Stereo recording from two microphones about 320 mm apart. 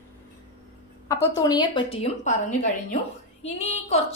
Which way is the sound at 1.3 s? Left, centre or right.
Centre.